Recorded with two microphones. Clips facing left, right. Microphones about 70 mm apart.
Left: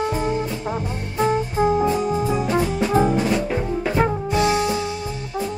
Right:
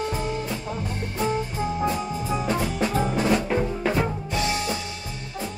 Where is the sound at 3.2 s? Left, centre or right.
Centre.